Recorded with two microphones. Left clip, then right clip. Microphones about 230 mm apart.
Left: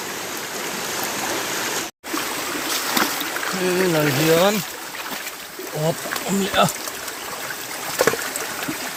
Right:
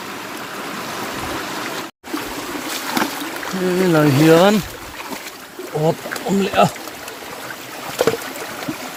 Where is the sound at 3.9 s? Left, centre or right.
Right.